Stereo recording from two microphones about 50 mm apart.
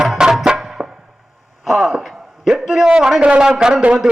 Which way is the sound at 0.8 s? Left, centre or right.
Centre.